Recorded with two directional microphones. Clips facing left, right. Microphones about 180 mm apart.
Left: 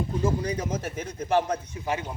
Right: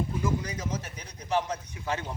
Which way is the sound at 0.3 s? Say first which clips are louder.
Left 4 dB; 35° left (ahead or behind).